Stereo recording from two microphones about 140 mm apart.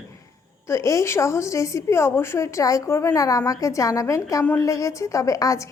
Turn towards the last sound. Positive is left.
turn(degrees=20)  # may be behind; listen again after turning